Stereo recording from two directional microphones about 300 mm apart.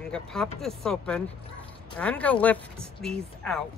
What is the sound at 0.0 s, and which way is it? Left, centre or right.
Speech, centre.